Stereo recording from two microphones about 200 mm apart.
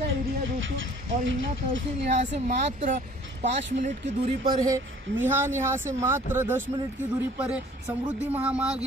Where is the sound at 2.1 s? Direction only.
35° right (ahead or behind).